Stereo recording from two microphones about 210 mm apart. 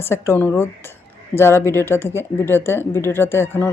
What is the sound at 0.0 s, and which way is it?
Speech, 10° left (ahead or behind).